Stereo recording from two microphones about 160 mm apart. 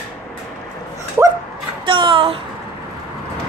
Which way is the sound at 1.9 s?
35° right (ahead or behind).